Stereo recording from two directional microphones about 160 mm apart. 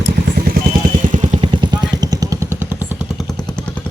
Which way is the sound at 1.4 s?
30° right (ahead or behind).